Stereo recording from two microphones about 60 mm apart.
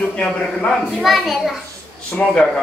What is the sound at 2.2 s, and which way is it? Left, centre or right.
Speech, left.